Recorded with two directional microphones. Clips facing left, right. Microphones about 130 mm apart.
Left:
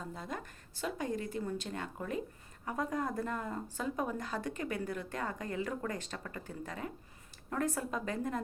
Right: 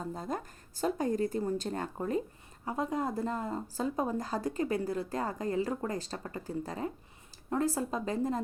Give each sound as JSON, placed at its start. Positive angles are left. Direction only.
{"t": 0.0, "sound": "speech", "side_deg": -40}